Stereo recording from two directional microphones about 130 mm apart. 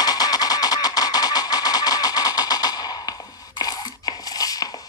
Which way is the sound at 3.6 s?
30° left (ahead or behind).